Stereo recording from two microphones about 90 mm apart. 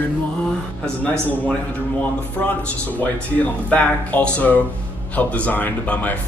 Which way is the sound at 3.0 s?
15° left (ahead or behind).